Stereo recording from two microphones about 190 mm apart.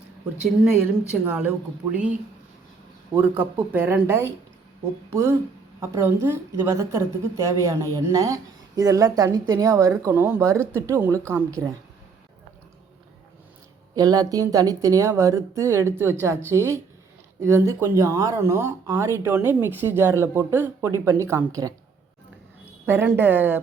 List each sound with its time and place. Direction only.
0.4 s a woman's voice: 5° right (ahead or behind)
3.2 s a woman's voice: 10° right (ahead or behind)
5.8 s a woman's voice: 15° right (ahead or behind)
13.9 s a woman's voice: 20° right (ahead or behind)
22.9 s a woman's voice: 10° right (ahead or behind)